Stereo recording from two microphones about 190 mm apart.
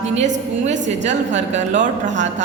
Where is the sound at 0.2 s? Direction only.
40° right (ahead or behind).